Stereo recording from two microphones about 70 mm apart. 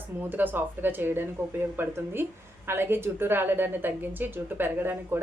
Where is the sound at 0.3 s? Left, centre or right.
Right.